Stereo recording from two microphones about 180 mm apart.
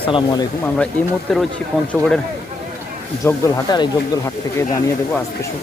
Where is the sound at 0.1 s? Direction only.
25° left (ahead or behind).